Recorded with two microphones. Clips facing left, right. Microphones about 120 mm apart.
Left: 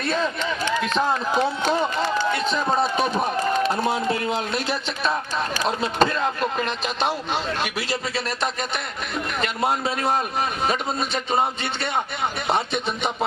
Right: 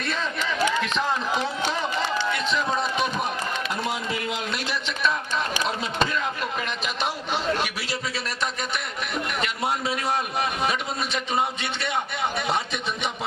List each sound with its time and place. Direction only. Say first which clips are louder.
0.9 s a sound: left 4 dB; 45° left (ahead or behind)
5.6 s speech: left 5 dB; 35° left (ahead or behind)
9.6 s a man's voice: left 5 dB; 55° left (ahead or behind)